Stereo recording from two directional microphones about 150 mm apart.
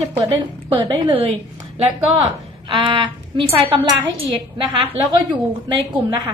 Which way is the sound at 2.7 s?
35° right (ahead or behind).